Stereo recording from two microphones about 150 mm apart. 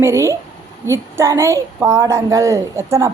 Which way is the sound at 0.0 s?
20° right (ahead or behind).